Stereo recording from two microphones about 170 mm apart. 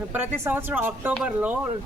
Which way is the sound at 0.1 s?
10° right (ahead or behind).